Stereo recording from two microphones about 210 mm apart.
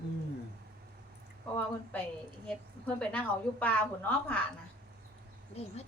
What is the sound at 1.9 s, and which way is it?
A woman's voice, 5° left (ahead or behind).